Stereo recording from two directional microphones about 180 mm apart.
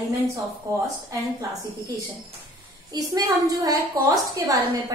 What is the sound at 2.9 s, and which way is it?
A woman's voice, 20° right (ahead or behind).